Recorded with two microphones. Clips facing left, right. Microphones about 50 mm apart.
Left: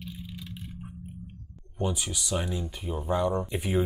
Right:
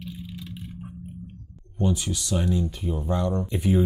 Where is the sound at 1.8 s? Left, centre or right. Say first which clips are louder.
Right 5 dB; centre.